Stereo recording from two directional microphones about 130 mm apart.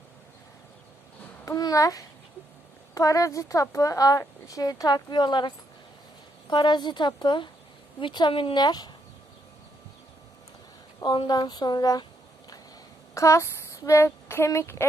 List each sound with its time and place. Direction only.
1.5 s a child's voice: 30° left (ahead or behind)
11.0 s speech: 35° left (ahead or behind)
13.1 s speech: 25° left (ahead or behind)